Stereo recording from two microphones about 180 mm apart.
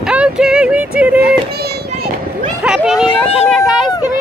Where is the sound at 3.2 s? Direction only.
35° left (ahead or behind).